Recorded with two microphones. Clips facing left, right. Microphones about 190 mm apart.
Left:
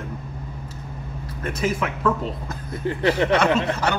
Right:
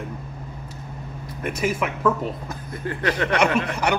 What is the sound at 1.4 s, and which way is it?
Speech, 10° right (ahead or behind).